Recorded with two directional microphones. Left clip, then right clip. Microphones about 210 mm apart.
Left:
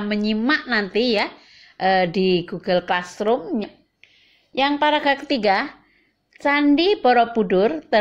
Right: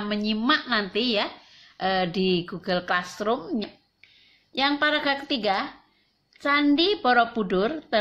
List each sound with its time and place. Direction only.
0.1 s a woman's voice: 20° left (ahead or behind)